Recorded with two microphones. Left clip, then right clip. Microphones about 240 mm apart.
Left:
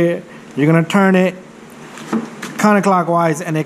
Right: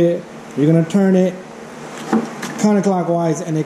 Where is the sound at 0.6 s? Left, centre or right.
Centre.